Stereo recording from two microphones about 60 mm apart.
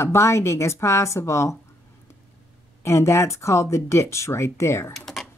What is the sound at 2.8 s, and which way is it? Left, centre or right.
A woman's voice, left.